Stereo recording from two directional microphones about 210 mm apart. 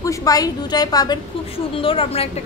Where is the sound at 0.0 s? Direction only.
15° left (ahead or behind).